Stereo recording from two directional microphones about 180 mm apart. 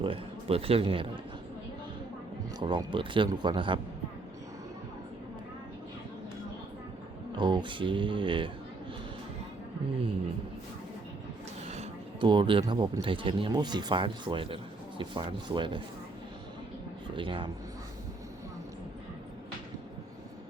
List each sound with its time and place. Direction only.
0.0 s speech: 30° right (ahead or behind)
2.6 s speech: 25° right (ahead or behind)
7.3 s speech: 25° right (ahead or behind)
11.7 s speech: 30° right (ahead or behind)
17.2 s speech: 30° right (ahead or behind)